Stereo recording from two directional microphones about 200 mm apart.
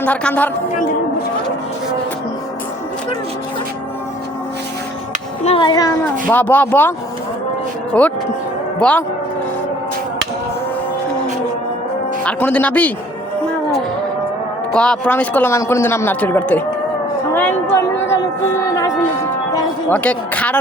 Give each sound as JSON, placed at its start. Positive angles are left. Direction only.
{"t": 0.0, "sound": "speech", "side_deg": 5}
{"t": 5.5, "sound": "speech", "side_deg": 25}
{"t": 6.3, "sound": "speech", "side_deg": 10}
{"t": 7.9, "sound": "speech", "side_deg": 5}
{"t": 12.2, "sound": "speech", "side_deg": 5}
{"t": 14.7, "sound": "speech", "side_deg": 5}